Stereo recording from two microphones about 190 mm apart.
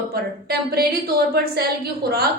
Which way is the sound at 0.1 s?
55° right (ahead or behind).